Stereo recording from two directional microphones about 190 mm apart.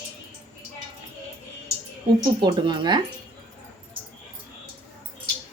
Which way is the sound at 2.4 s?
25° right (ahead or behind).